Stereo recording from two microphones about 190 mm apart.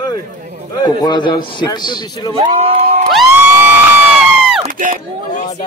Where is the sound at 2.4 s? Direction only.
35° right (ahead or behind).